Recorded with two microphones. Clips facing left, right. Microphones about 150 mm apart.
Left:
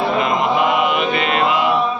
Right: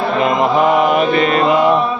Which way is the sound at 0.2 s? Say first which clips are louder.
Right 7 dB; 40° right (ahead or behind).